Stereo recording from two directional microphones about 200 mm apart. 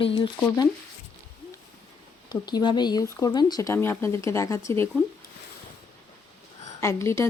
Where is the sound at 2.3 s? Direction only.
20° left (ahead or behind).